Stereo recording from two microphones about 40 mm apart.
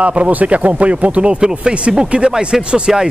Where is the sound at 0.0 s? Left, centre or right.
Right.